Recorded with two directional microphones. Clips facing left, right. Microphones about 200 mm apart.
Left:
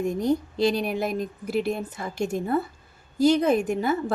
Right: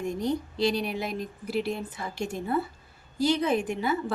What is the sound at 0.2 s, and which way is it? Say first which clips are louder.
A woman's voice: left 3 dB; 45° left (ahead or behind).